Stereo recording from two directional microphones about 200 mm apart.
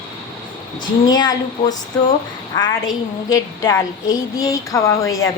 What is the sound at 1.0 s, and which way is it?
A woman's voice, 20° left (ahead or behind).